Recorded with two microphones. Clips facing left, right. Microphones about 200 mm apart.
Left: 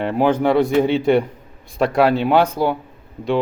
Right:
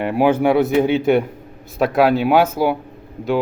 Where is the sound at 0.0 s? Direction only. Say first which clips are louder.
Right 1 dB; 10° right (ahead or behind).